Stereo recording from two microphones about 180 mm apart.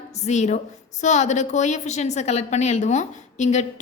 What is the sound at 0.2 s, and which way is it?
A woman's voice, 40° left (ahead or behind).